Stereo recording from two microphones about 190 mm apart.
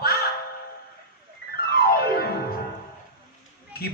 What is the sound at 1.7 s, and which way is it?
Music, 55° left (ahead or behind).